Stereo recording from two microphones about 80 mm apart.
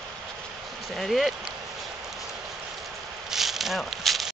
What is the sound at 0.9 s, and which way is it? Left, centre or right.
Speech, centre.